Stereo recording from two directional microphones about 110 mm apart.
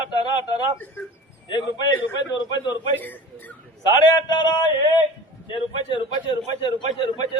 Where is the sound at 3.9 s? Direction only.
40° left (ahead or behind).